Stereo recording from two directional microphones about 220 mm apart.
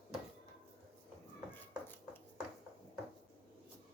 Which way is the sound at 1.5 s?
10° left (ahead or behind).